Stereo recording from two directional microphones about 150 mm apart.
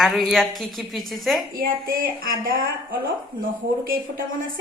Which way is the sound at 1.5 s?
75° right (ahead or behind).